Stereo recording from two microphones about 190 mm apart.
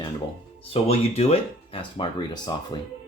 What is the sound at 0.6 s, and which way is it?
Speech, 30° left (ahead or behind).